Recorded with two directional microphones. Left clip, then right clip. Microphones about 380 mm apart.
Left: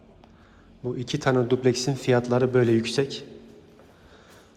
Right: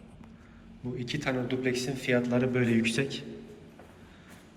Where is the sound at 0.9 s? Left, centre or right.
Centre.